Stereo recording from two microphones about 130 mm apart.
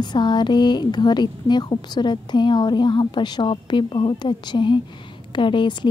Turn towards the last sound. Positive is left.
turn(degrees=40)  # may be behind; listen again after turning